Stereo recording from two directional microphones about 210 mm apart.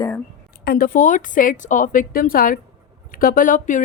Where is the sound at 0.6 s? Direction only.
45° left (ahead or behind).